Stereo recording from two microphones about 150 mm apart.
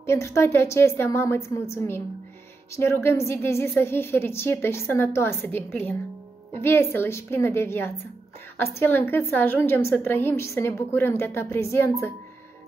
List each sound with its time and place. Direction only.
0.0 s a woman's voice: 15° left (ahead or behind)